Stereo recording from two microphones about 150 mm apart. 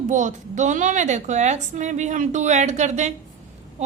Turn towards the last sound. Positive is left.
turn(degrees=-50)  # may be behind; listen again after turning